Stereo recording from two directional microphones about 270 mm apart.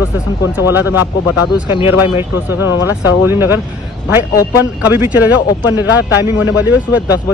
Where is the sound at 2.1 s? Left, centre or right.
Centre.